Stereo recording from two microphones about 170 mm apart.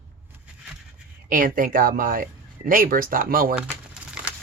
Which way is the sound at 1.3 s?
55° right (ahead or behind).